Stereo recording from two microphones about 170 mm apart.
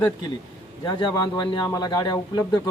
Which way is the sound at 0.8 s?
25° left (ahead or behind).